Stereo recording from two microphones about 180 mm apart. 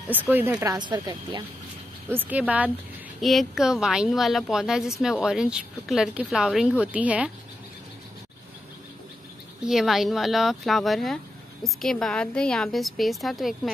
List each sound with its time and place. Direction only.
0.1 s speech: 10° right (ahead or behind)
2.0 s speech: 10° right (ahead or behind)
9.6 s speech: centre (ahead or behind)